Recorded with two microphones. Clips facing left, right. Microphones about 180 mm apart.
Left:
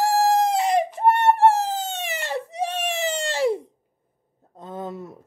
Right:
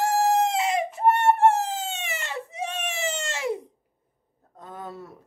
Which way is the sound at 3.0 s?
35° left (ahead or behind).